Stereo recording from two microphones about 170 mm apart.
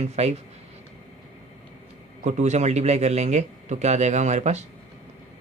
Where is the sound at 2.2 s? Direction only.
45° right (ahead or behind).